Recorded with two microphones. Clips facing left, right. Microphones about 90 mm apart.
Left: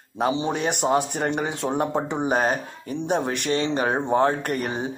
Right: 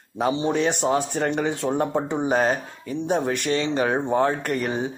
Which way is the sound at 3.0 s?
65° left (ahead or behind).